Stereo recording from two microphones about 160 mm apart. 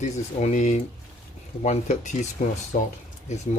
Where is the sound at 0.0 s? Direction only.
50° left (ahead or behind).